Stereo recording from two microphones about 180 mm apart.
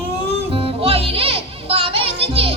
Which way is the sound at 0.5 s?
30° right (ahead or behind).